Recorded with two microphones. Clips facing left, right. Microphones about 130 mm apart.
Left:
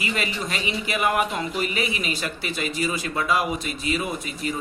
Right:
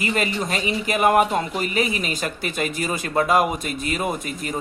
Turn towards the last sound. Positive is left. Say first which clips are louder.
# right 2 dB
turn(degrees=-50)  # may be behind; listen again after turning